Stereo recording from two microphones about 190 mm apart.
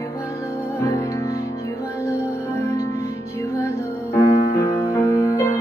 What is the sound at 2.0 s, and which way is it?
Music, 15° left (ahead or behind).